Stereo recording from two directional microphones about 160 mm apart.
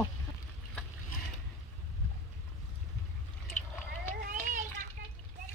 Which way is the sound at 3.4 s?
10° left (ahead or behind).